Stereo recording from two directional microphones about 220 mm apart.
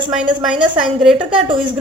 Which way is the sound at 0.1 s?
5° right (ahead or behind).